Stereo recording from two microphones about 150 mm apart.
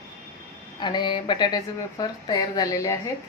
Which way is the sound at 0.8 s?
30° left (ahead or behind).